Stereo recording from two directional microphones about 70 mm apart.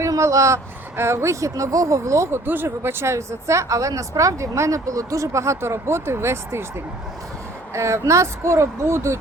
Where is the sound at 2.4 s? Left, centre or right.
Right.